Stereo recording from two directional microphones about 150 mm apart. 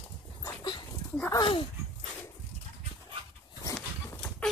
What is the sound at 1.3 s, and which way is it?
Speech, 30° left (ahead or behind).